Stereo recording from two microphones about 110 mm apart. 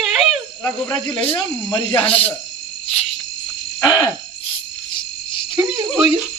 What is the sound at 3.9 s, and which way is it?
Hoot, 35° left (ahead or behind).